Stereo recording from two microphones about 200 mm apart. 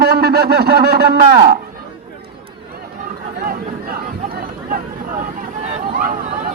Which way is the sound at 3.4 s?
50° right (ahead or behind).